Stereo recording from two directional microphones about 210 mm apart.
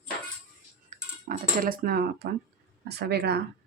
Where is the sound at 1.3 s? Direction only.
40° right (ahead or behind).